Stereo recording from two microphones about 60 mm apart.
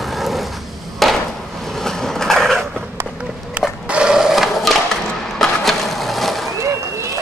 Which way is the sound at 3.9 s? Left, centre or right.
Centre.